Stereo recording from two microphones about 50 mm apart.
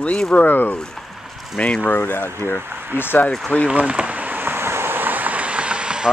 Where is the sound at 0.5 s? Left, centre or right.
Left.